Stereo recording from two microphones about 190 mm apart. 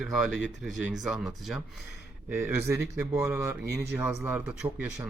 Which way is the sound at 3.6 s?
60° right (ahead or behind).